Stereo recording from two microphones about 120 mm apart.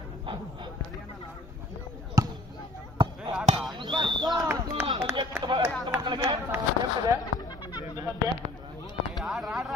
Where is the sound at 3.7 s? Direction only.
40° right (ahead or behind).